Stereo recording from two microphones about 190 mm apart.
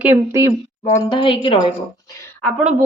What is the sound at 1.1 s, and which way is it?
Speech, 25° left (ahead or behind).